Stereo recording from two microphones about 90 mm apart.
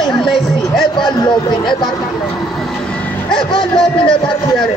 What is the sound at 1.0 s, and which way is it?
Speech, 60° left (ahead or behind).